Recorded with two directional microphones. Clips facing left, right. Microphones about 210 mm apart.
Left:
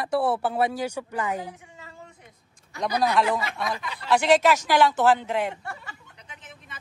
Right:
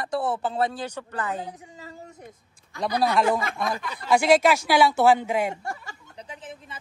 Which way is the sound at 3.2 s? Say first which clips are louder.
Right 3 dB; 50° right (ahead or behind).